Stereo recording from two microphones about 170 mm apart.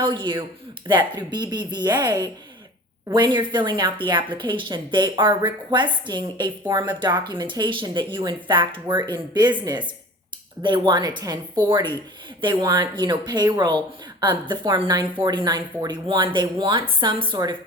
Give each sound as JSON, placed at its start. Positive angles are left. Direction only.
{"t": 0.0, "sound": "a woman's voice", "side_deg": -30}